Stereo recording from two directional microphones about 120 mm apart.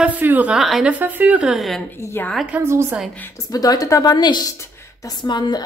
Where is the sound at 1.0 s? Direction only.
15° right (ahead or behind).